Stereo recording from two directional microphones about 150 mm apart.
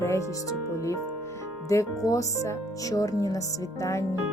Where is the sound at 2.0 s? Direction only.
20° left (ahead or behind).